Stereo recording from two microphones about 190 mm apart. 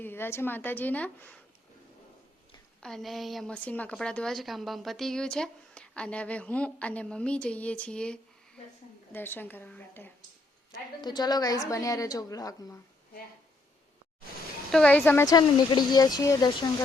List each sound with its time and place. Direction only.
0.0 s a woman's voice: 10° left (ahead or behind)
2.8 s a woman's voice: centre (ahead or behind)
10.7 s a woman's voice: 20° left (ahead or behind)
14.7 s a woman's voice: 5° left (ahead or behind); by 16.6 s 20° left (ahead or behind)